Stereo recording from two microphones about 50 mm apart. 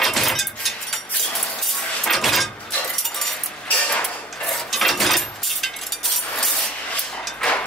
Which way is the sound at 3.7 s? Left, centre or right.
Left.